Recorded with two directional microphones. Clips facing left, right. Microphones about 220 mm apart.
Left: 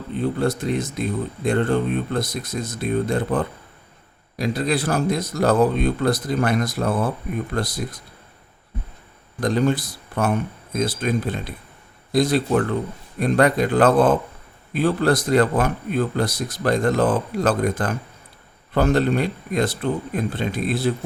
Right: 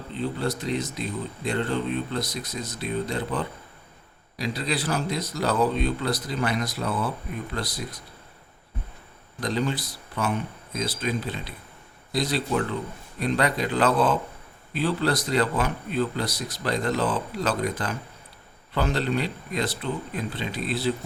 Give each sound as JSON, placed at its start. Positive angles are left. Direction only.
{"t": 0.2, "sound": "speech", "side_deg": 50}
{"t": 9.4, "sound": "speech", "side_deg": 50}